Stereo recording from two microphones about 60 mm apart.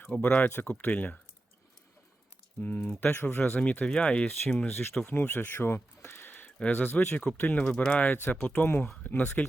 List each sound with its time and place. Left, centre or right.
0.1 s speech: left
2.6 s speech: left
3.5 s speech: left
5.0 s speech: left
7.6 s speech: centre
8.6 s speech: left
9.0 s speech: left